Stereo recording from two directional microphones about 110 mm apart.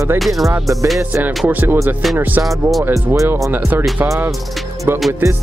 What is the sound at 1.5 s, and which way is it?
Speech, 15° right (ahead or behind).